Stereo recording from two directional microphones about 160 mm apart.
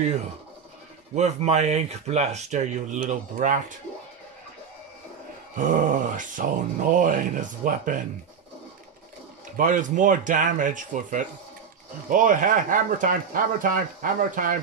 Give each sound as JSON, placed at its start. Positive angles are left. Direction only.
{"t": 1.1, "sound": "speech", "side_deg": -45}
{"t": 5.6, "sound": "speech", "side_deg": -55}
{"t": 9.6, "sound": "speech", "side_deg": -55}